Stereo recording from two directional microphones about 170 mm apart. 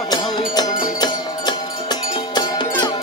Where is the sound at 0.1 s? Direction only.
25° left (ahead or behind).